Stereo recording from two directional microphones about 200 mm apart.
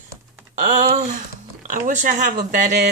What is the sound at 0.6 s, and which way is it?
A woman's voice, 40° right (ahead or behind).